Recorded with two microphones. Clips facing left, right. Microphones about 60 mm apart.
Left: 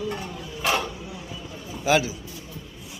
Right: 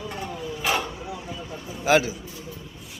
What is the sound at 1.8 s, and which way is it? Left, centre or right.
Speech, right.